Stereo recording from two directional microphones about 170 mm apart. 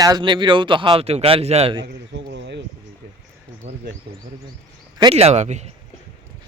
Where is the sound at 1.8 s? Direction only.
90° right.